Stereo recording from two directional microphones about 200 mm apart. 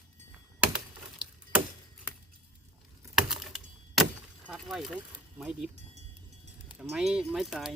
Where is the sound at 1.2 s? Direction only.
5° right (ahead or behind).